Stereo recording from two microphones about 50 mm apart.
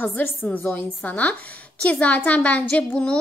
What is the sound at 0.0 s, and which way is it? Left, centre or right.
A woman's voice, left.